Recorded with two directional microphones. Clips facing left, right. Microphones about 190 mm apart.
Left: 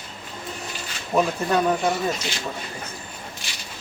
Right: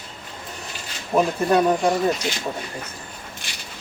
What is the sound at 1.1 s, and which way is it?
Speech, 10° right (ahead or behind).